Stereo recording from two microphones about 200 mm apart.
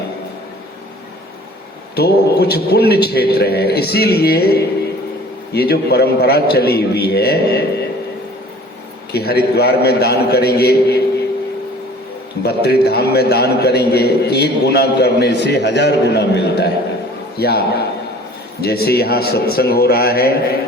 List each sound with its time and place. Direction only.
2.0 s a man's voice: 55° left (ahead or behind)
9.1 s a man's voice: 55° left (ahead or behind)
12.4 s a man's voice: 55° left (ahead or behind)